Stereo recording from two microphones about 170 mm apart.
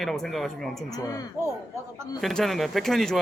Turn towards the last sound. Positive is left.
turn(degrees=0)  # may be behind; listen again after turning